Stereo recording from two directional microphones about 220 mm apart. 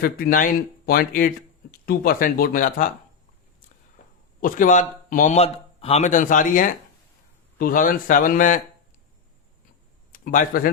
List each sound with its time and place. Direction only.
0.0 s speech: 40° left (ahead or behind)
3.9 s a sound: 40° left (ahead or behind)
5.8 s speech: 30° left (ahead or behind)
10.1 s speech: 40° left (ahead or behind)